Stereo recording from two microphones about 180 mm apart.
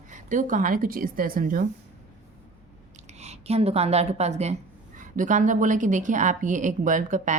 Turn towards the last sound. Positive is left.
turn(degrees=-45)  # may be behind; listen again after turning